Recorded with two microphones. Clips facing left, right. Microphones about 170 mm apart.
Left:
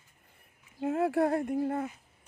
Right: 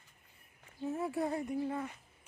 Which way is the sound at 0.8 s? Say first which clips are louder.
Left 8 dB; 75° left (ahead or behind).